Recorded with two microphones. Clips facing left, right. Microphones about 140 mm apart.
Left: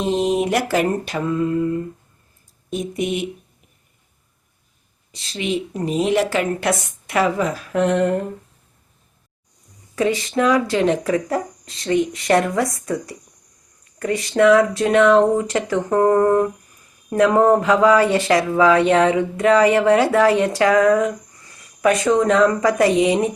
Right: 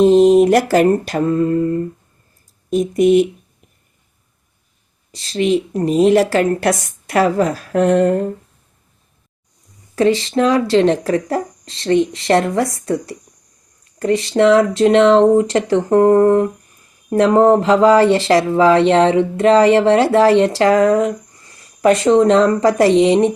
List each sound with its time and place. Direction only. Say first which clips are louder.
0.0 s speech: right 11 dB; 40° right (ahead or behind)
0.4 s a sound: right 7 dB; 45° right (ahead or behind)
2.6 s speech: right 10 dB; 40° right (ahead or behind)
5.1 s speech: right 7 dB; 40° right (ahead or behind)
9.9 s speech: right 5 dB; 30° right (ahead or behind)